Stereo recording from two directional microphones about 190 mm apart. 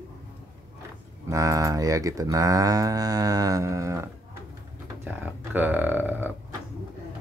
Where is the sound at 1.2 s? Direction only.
15° right (ahead or behind).